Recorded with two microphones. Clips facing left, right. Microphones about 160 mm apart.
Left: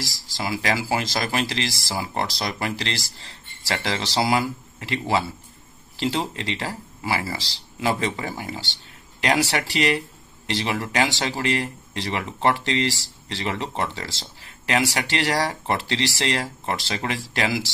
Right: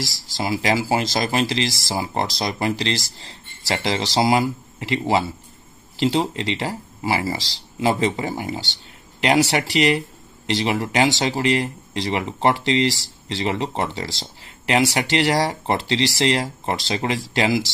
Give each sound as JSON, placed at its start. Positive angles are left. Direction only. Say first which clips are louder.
{"t": 0.4, "sound": "speech", "louder": "right 4 dB", "side_deg": -25}